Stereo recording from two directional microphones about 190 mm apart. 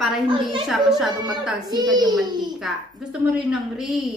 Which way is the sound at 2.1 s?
5° right (ahead or behind).